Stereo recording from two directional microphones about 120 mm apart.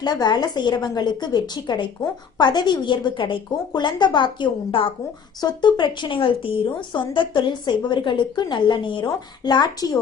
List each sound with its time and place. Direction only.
0.0 s speech: 35° left (ahead or behind)